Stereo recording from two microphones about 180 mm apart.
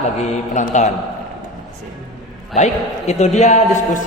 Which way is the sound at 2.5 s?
40° left (ahead or behind).